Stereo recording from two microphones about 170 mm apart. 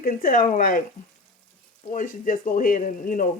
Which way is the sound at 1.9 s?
50° left (ahead or behind).